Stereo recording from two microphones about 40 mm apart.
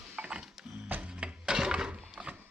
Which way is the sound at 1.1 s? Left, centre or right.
Right.